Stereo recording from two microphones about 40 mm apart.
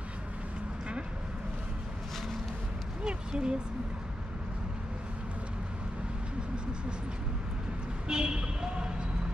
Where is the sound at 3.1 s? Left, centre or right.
Right.